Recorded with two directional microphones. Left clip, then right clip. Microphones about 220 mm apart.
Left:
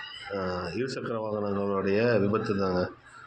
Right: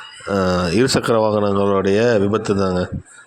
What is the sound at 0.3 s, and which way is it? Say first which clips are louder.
Speech: right 14 dB; 50° right (ahead or behind).